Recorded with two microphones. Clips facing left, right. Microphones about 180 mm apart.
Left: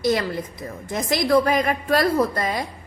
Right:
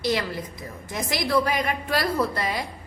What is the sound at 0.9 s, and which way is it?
A woman's voice, 45° left (ahead or behind).